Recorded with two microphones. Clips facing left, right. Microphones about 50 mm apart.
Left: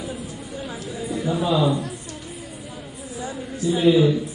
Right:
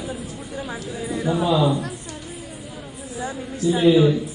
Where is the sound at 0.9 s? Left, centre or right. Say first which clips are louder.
Right 1 dB; centre.